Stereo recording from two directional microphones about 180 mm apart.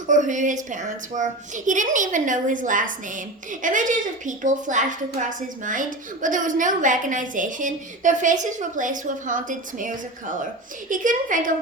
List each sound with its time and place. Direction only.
0.1 s a woman's voice: 45° right (ahead or behind)